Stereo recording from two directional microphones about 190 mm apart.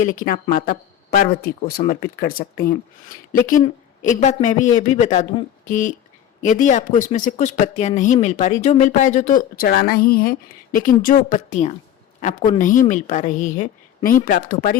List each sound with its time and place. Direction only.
0.0 s a woman's voice: 45° left (ahead or behind)
4.0 s a woman's voice: 40° left (ahead or behind)